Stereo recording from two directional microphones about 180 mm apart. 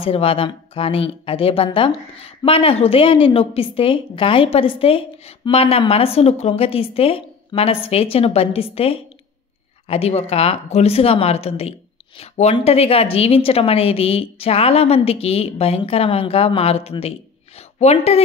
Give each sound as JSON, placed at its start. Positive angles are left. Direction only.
{"t": 0.0, "sound": "a woman's voice", "side_deg": 30}